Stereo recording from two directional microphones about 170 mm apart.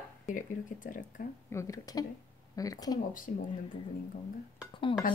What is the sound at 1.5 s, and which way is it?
A woman's voice, 20° left (ahead or behind).